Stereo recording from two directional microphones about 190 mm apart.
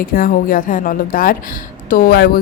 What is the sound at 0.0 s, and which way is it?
Speech, 50° left (ahead or behind).